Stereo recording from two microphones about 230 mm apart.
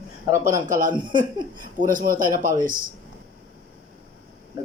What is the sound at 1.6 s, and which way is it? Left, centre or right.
Speech, right.